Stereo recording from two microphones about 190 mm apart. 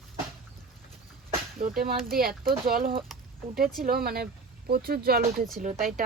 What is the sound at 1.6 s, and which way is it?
Speech, 50° right (ahead or behind).